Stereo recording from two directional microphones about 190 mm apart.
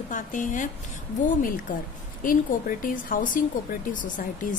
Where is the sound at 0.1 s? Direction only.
40° left (ahead or behind).